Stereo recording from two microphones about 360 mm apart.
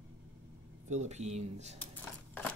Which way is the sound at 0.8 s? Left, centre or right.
Centre.